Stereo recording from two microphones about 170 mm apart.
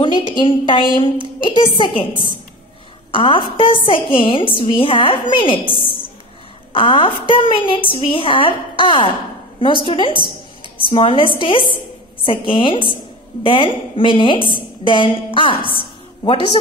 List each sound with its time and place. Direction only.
0.3 s a woman's voice: 30° left (ahead or behind)